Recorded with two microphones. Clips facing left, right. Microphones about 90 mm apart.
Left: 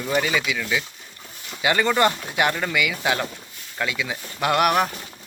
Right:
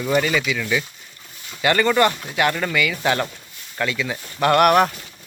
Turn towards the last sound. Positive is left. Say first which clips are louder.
# right 5 dB
turn(degrees=5)  # may be behind; listen again after turning